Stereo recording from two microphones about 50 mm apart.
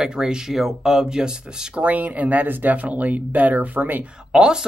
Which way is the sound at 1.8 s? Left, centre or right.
Right.